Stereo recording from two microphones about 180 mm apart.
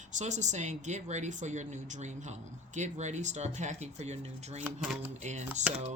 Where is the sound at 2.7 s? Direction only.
40° right (ahead or behind).